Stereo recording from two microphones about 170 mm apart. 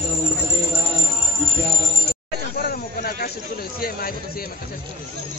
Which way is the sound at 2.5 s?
60° left (ahead or behind).